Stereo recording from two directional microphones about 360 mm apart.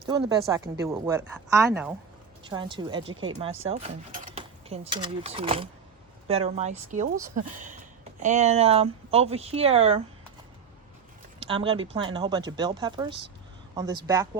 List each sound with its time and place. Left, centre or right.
0.1 s speech: centre
3.0 s speech: right
4.4 s speech: centre
11.3 s speech: centre